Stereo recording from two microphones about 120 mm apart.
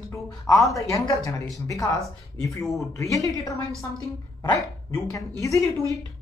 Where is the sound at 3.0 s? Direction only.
25° left (ahead or behind).